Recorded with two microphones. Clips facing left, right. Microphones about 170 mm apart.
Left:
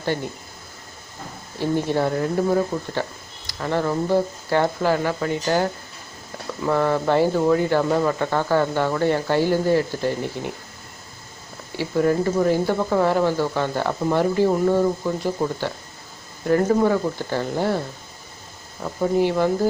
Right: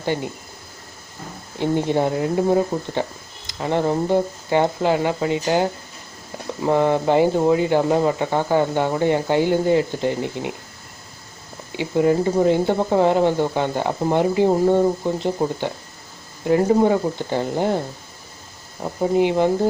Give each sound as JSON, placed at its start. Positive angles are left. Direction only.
{"t": 0.0, "sound": "speech", "side_deg": -15}
{"t": 1.5, "sound": "speech", "side_deg": -20}
{"t": 11.8, "sound": "speech", "side_deg": -20}